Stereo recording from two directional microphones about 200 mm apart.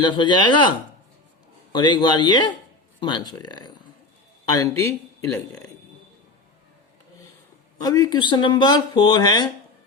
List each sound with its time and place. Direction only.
0.0 s speech: 25° left (ahead or behind)
1.7 s speech: 25° left (ahead or behind)
7.8 s speech: 20° left (ahead or behind)